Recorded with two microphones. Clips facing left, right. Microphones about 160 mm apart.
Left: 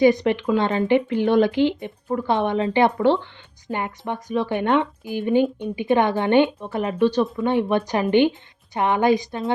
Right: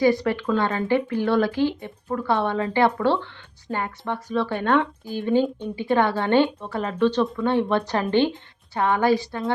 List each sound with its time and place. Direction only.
0.0 s speech: 20° left (ahead or behind)